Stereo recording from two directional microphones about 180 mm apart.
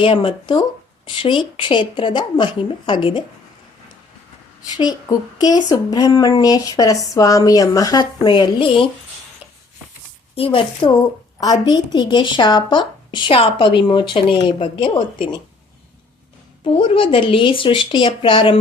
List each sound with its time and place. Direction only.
0.0 s speech: 30° left (ahead or behind)
4.8 s speech: 20° left (ahead or behind)
10.3 s speech: 30° left (ahead or behind)
16.6 s speech: 30° left (ahead or behind)